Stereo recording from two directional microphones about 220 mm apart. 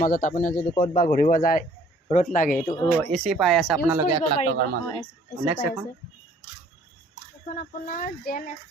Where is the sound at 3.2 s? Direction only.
Centre (ahead or behind).